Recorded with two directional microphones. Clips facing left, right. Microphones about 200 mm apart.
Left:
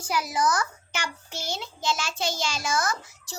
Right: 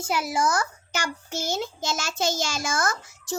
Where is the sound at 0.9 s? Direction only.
45° right (ahead or behind).